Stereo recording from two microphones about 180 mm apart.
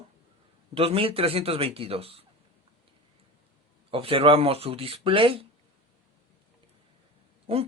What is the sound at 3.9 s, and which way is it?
Speech, 30° right (ahead or behind).